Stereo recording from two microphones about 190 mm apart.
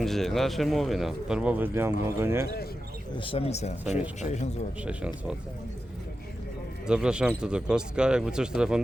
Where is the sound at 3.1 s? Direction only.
30° left (ahead or behind).